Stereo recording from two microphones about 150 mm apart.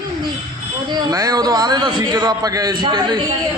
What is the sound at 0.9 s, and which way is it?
A man's voice, 25° right (ahead or behind).